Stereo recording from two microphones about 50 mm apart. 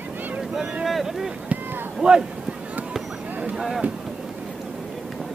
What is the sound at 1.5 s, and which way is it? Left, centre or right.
Run, right.